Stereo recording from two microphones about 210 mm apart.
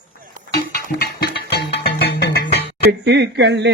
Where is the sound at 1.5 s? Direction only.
50° left (ahead or behind).